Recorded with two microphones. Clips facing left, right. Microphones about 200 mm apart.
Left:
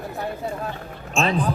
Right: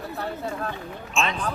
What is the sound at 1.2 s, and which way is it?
Speech, 35° left (ahead or behind).